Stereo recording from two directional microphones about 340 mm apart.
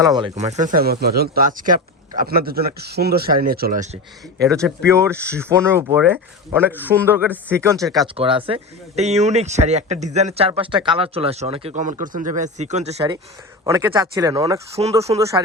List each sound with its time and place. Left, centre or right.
0.0 s a man's voice: centre
0.3 s speech: centre
4.5 s a man's voice: centre
5.1 s speech: centre
5.4 s a man's voice: centre